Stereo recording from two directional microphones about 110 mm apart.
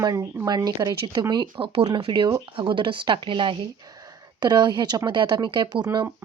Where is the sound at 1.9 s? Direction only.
45° right (ahead or behind).